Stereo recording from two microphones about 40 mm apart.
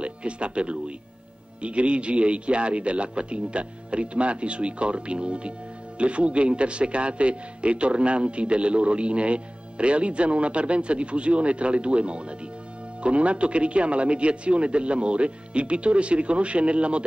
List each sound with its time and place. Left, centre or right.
0.0 s a man's voice: right